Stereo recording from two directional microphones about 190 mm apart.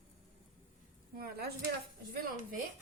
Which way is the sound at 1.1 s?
55° right (ahead or behind).